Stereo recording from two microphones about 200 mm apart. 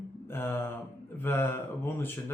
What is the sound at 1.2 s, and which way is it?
Speech, 10° left (ahead or behind).